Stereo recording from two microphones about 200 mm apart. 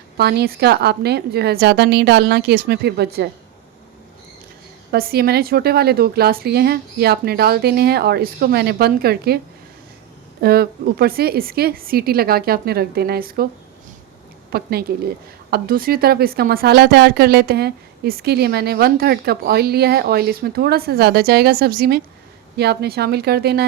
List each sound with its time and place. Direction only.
0.2 s a woman's voice: 55° right (ahead or behind)
4.9 s a woman's voice: 50° right (ahead or behind)
10.4 s a woman's voice: 50° right (ahead or behind)
14.5 s a woman's voice: 50° right (ahead or behind)